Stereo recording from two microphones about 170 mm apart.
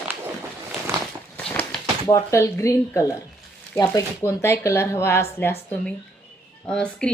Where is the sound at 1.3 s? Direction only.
10° left (ahead or behind).